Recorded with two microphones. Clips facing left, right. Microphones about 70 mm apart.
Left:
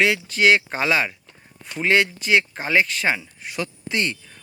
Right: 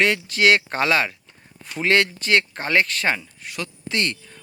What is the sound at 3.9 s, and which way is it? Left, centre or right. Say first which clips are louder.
Speech: right 1 dB; centre.